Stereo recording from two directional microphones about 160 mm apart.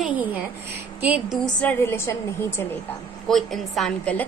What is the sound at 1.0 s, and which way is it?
Speech, 10° right (ahead or behind).